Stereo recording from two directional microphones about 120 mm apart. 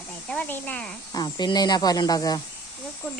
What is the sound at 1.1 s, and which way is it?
Speech, 35° left (ahead or behind).